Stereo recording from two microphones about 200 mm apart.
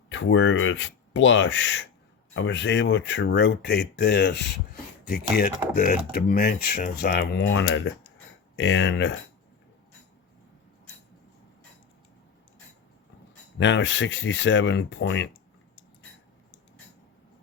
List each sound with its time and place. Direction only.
0.1 s speech: 70° left (ahead or behind); by 7.4 s 50° left (ahead or behind)
7.4 s speech: 70° left (ahead or behind)
13.6 s speech: 65° left (ahead or behind)